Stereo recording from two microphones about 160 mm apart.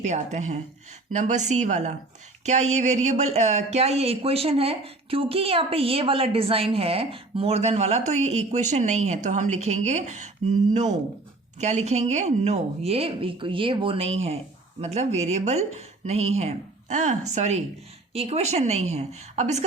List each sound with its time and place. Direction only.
0.0 s speech: 45° right (ahead or behind)
11.6 s speech: 45° right (ahead or behind)